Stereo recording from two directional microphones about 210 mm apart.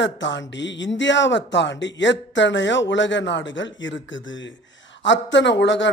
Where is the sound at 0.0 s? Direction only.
60° left (ahead or behind).